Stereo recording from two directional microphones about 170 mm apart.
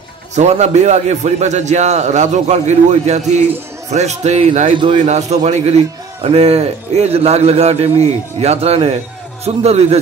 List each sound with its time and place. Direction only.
0.4 s a man's voice: 40° right (ahead or behind)
4.7 s a man's voice: 30° right (ahead or behind)
5.0 s a man's voice: 40° right (ahead or behind)